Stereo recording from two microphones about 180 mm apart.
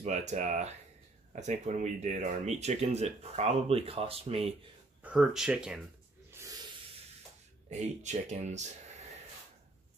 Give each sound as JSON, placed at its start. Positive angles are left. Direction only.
{"t": 0.0, "sound": "speech", "side_deg": -40}
{"t": 5.0, "sound": "speech", "side_deg": -5}
{"t": 7.7, "sound": "speech", "side_deg": -40}